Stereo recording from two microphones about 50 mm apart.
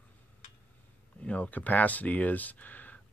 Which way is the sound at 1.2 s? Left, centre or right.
Left.